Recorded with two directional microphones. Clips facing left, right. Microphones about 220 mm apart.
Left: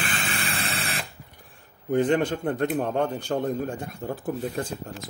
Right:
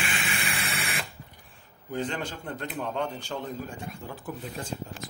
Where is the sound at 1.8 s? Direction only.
55° left (ahead or behind).